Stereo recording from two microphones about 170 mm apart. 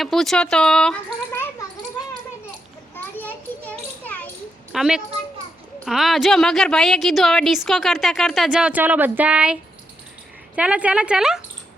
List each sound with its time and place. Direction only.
0.0 s a woman's voice: centre (ahead or behind)
2.9 s children playing: 10° left (ahead or behind)
4.7 s a woman's voice: 5° right (ahead or behind)